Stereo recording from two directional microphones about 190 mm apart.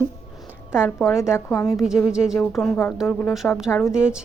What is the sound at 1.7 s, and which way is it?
A woman's voice, centre (ahead or behind).